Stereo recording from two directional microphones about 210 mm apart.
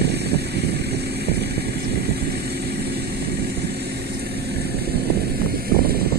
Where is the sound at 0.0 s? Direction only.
50° right (ahead or behind).